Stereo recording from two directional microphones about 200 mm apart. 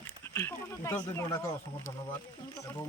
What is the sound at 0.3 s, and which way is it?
Speech, 10° left (ahead or behind).